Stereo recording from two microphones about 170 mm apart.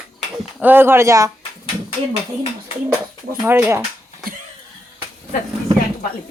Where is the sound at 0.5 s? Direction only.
10° right (ahead or behind).